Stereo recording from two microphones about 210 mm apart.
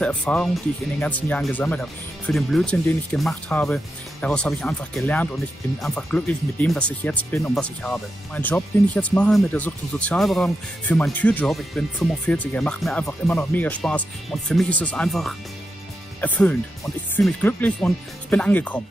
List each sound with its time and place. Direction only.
0.0 s speech: 5° left (ahead or behind)